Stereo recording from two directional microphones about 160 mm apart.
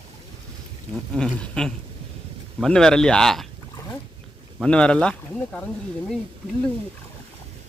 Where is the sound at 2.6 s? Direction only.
5° left (ahead or behind).